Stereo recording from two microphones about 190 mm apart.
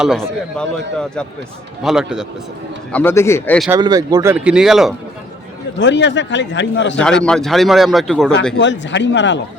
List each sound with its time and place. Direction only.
0.0 s a man's voice: centre (ahead or behind)
2.9 s a man's voice: 10° left (ahead or behind)
3.7 s speech: 20° right (ahead or behind); by 4.9 s centre (ahead or behind)
5.8 s a man's voice: 70° left (ahead or behind)
7.0 s a man's voice: 5° left (ahead or behind)
8.5 s a man's voice: 70° left (ahead or behind)